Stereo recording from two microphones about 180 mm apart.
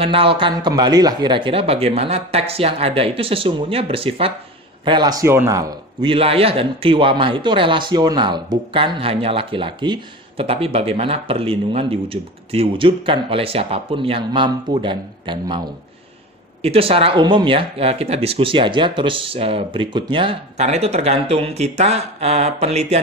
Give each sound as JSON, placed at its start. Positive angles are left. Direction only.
{"t": 0.0, "sound": "a man's voice", "side_deg": -30}
{"t": 16.6, "sound": "speech", "side_deg": -30}